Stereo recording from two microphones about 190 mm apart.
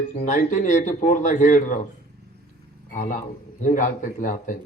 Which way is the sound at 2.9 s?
40° left (ahead or behind).